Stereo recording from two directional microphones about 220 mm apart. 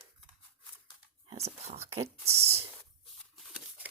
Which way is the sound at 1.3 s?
30° right (ahead or behind).